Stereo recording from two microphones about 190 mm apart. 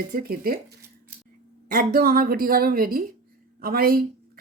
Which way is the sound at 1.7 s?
50° right (ahead or behind).